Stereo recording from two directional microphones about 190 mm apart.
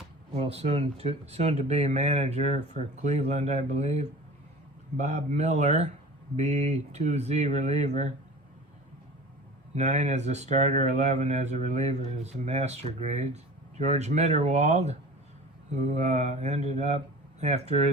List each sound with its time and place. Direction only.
0.3 s speech: 30° right (ahead or behind)
9.7 s speech: 35° right (ahead or behind)